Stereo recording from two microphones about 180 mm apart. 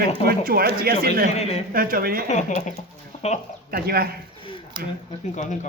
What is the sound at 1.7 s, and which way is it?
Speech, 55° right (ahead or behind).